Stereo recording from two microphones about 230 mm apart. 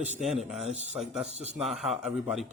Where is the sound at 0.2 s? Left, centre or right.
Centre.